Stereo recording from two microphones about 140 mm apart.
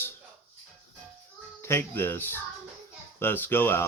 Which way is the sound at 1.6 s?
15° left (ahead or behind).